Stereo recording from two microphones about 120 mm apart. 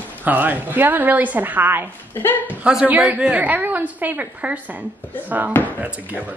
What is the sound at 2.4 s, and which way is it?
Speech, 10° right (ahead or behind).